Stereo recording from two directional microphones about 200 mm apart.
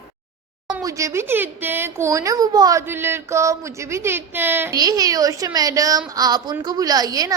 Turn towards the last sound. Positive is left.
turn(degrees=-20)  # may be behind; listen again after turning